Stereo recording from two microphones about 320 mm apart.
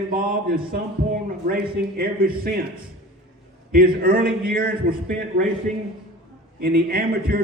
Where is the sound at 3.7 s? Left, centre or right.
Right.